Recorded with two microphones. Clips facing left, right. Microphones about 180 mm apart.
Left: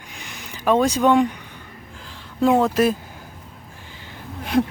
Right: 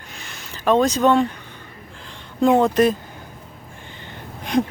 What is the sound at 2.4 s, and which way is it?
Speech, 5° left (ahead or behind).